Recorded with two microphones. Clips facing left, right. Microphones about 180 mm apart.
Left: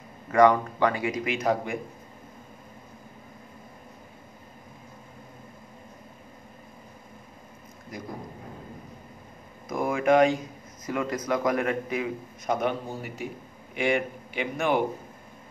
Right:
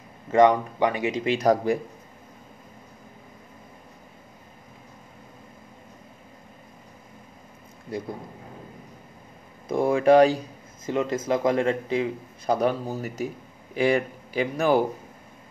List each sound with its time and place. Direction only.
0.3 s a man's voice: 20° right (ahead or behind)
7.9 s a man's voice: 30° right (ahead or behind)
9.7 s a man's voice: 30° right (ahead or behind)